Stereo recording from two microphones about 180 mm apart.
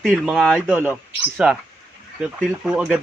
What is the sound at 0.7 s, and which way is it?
Speech, 10° right (ahead or behind).